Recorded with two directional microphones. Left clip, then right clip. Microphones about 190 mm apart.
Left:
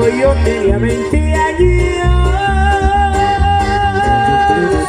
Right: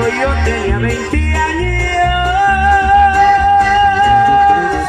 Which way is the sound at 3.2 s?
25° left (ahead or behind).